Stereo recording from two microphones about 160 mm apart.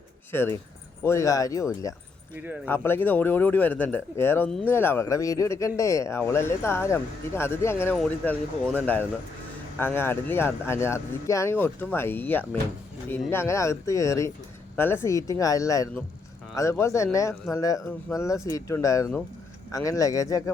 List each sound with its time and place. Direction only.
0.3 s speech: 15° left (ahead or behind)
2.6 s speech: 15° left (ahead or behind)